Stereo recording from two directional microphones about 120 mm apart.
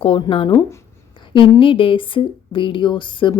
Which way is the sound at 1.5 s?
45° left (ahead or behind).